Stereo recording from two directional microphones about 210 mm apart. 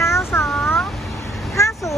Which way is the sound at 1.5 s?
15° left (ahead or behind).